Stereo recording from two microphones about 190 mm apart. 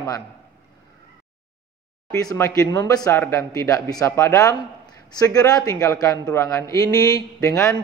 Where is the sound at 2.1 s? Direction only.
15° left (ahead or behind).